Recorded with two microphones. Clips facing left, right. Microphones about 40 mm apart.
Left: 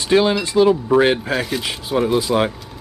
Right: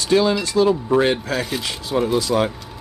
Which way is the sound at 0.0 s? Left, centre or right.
Left.